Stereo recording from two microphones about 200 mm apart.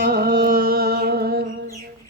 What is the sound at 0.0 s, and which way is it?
Music, 50° right (ahead or behind).